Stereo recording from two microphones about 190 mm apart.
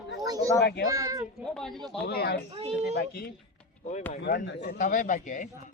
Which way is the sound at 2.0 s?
55° left (ahead or behind).